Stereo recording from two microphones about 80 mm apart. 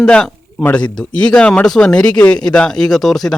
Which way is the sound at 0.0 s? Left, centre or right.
Centre.